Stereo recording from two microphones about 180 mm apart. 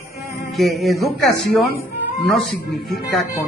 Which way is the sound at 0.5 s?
Centre (ahead or behind).